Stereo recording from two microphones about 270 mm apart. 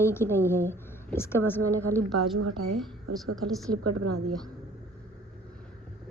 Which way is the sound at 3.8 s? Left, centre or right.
Right.